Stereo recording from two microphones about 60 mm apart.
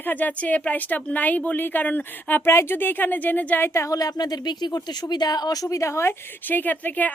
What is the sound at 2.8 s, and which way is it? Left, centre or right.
Speech, left.